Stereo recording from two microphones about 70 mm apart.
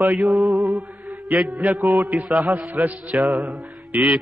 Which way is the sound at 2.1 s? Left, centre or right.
Centre.